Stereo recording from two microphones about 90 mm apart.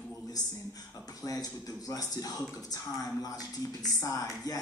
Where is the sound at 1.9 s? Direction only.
45° left (ahead or behind).